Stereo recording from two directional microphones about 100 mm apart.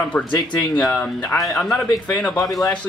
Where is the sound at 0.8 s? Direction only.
5° left (ahead or behind).